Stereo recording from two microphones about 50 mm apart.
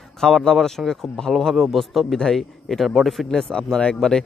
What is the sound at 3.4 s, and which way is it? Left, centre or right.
Speech, centre.